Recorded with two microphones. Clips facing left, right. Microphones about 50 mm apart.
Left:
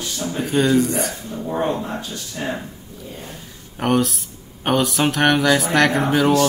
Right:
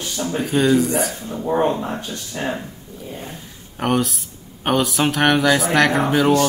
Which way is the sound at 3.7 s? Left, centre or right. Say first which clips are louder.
Left 1 dB; centre.